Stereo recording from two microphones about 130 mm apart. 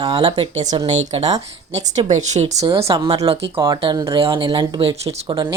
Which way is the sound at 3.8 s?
30° right (ahead or behind).